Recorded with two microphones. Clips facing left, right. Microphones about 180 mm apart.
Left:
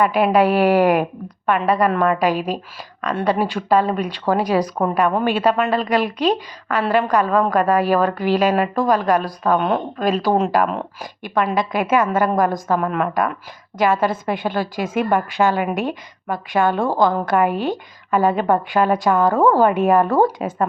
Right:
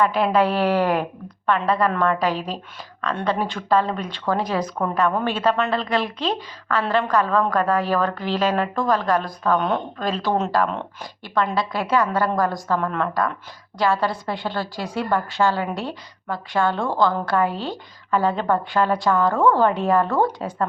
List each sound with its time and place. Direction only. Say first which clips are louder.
0.0 s a woman's voice: left 3 dB; 15° left (ahead or behind)